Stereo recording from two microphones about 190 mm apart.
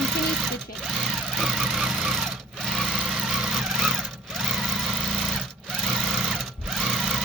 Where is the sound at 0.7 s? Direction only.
Centre (ahead or behind).